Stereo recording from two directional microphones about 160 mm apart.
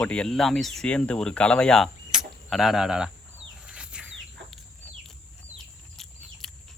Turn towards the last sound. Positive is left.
turn(degrees=0)  # may be behind; listen again after turning